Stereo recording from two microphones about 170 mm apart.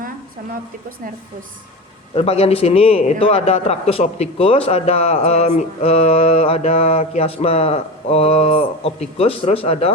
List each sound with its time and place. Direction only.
2.1 s a man's voice: 35° left (ahead or behind)